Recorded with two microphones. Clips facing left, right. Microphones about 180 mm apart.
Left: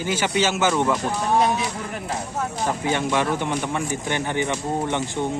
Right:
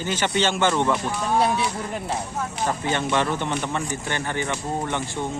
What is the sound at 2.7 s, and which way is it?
Speech, 10° left (ahead or behind).